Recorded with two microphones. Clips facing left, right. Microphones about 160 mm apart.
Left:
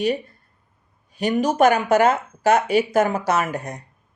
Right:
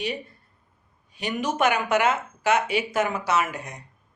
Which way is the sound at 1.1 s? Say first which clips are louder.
Left 7 dB; 40° left (ahead or behind).